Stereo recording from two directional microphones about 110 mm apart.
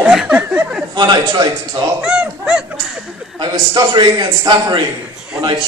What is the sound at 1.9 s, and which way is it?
Honk, 5° right (ahead or behind).